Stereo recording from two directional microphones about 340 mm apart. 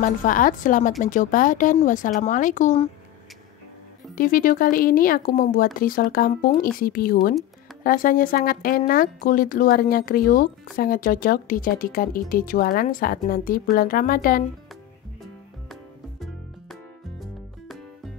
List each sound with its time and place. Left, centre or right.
0.0 s speech: left
4.1 s speech: left
15.7 s music: centre